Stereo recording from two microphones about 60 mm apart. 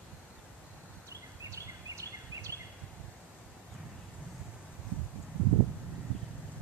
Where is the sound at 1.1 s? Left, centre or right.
Right.